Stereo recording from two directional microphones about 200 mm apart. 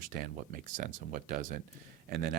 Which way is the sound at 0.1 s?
45° right (ahead or behind).